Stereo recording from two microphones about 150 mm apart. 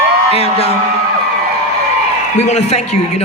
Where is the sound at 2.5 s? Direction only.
50° left (ahead or behind).